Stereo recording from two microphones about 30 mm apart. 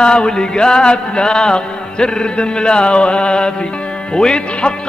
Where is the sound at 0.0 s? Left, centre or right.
Left.